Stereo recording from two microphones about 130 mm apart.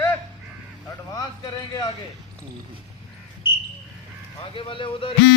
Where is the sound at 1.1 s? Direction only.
30° left (ahead or behind).